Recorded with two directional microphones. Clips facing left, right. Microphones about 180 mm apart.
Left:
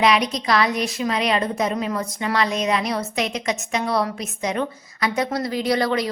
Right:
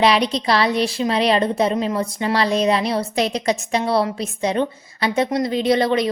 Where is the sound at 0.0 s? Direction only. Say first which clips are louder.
Right 2 dB; 30° right (ahead or behind).